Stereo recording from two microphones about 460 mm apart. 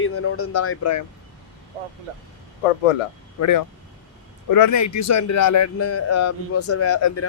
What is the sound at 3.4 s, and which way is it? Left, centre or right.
A man's voice, left.